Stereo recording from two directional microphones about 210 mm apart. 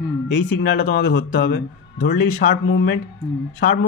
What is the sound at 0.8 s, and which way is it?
Speech, 55° left (ahead or behind).